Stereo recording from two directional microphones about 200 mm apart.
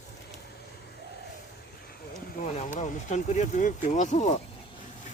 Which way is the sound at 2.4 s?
40° left (ahead or behind).